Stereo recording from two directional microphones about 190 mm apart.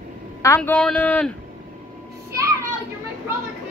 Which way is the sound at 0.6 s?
5° left (ahead or behind).